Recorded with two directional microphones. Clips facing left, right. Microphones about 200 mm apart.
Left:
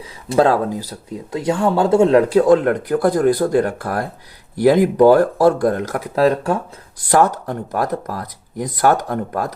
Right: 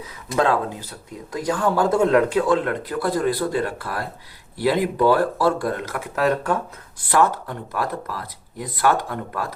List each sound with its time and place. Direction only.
0.3 s speech: 35° left (ahead or behind)
1.3 s speech: 25° left (ahead or behind)
7.1 s speech: 40° left (ahead or behind)